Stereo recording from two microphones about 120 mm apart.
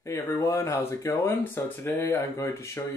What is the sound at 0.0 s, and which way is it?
Speech, 25° left (ahead or behind).